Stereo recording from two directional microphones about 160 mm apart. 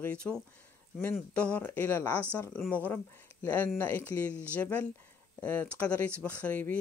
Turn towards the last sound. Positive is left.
turn(degrees=10)  # may be behind; listen again after turning